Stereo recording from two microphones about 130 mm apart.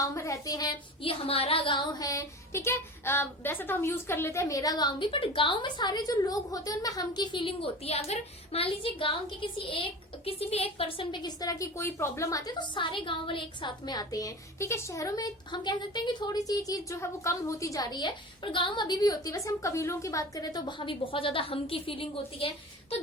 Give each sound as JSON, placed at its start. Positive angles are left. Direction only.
{"t": 0.0, "sound": "a woman's voice", "side_deg": 25}
{"t": 1.0, "sound": "child singing", "side_deg": 45}